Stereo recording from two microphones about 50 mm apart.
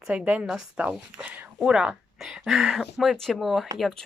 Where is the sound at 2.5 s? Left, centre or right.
Centre.